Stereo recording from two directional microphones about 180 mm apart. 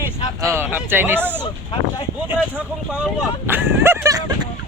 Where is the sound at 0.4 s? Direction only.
15° right (ahead or behind).